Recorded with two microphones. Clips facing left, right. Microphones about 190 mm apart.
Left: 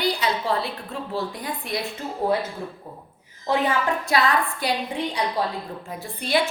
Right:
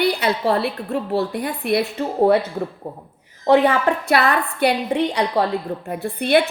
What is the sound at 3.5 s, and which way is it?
A woman's voice, 65° right (ahead or behind).